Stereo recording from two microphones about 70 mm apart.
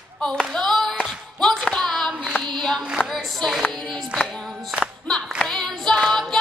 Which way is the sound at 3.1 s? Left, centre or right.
Centre.